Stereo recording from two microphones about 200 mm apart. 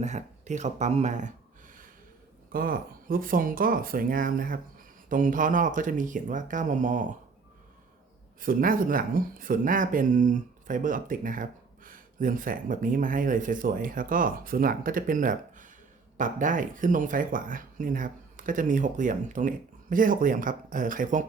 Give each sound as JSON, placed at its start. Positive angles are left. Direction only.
{"t": 0.0, "sound": "speech", "side_deg": -35}
{"t": 8.4, "sound": "speech", "side_deg": -45}